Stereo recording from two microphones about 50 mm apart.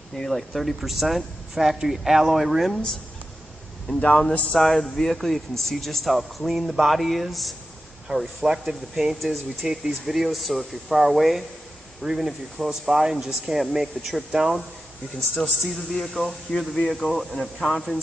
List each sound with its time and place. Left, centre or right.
0.3 s speech: centre
3.9 s speech: left
4.6 s speech: centre